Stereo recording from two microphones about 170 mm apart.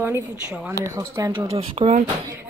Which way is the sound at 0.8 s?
20° right (ahead or behind).